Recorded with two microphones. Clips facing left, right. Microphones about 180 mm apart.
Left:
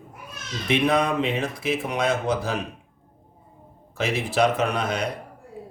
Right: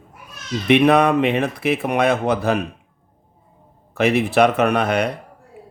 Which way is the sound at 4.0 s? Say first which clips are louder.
Right 7 dB; 60° right (ahead or behind).